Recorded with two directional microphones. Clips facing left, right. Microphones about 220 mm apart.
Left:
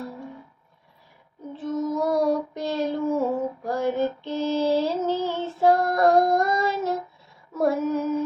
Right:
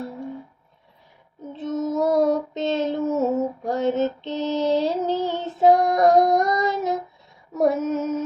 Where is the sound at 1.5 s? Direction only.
25° right (ahead or behind).